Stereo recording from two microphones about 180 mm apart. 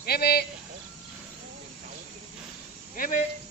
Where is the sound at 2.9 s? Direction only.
50° left (ahead or behind).